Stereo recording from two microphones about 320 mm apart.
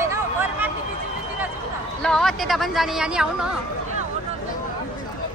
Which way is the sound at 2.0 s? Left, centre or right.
Centre.